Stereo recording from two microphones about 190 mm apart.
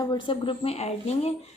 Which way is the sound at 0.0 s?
25° left (ahead or behind).